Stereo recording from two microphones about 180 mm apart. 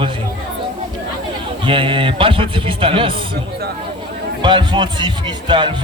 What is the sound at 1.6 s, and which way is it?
A man's voice, 30° right (ahead or behind).